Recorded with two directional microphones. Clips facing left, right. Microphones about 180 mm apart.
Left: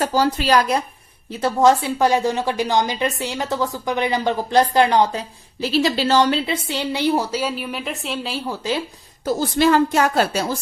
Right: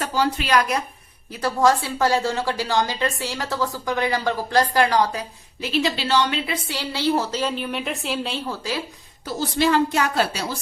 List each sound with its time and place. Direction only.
0.0 s a woman's voice: 40° left (ahead or behind)
1.4 s speech: 20° left (ahead or behind)
5.6 s a woman's voice: 40° left (ahead or behind)
6.4 s a woman's voice: 25° left (ahead or behind); by 8.4 s centre (ahead or behind)
8.4 s speech: 20° left (ahead or behind)
9.2 s a woman's voice: 45° left (ahead or behind)